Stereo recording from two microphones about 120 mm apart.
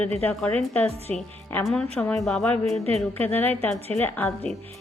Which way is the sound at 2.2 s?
5° left (ahead or behind).